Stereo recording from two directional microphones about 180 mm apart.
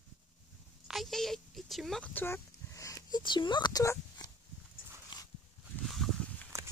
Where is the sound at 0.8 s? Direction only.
Centre (ahead or behind); by 4.3 s 20° left (ahead or behind).